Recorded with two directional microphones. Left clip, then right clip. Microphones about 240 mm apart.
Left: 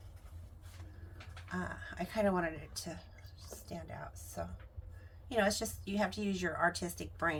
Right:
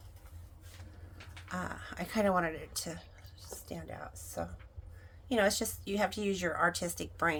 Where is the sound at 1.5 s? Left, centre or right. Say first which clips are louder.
Right 2 dB; right.